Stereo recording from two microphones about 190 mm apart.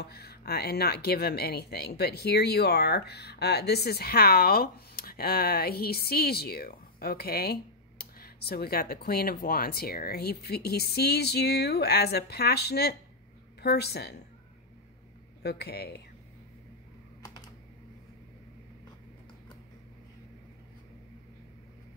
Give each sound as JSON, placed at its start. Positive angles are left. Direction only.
{"t": 0.0, "sound": "speech", "side_deg": 55}
{"t": 15.4, "sound": "speech", "side_deg": 60}